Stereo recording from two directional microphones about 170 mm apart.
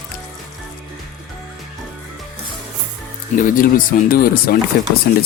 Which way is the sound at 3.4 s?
55° left (ahead or behind).